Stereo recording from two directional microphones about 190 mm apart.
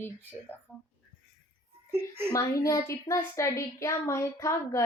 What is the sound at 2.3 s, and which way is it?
A woman's voice, 15° left (ahead or behind).